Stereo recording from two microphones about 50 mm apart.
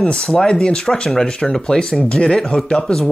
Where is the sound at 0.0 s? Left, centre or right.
Left.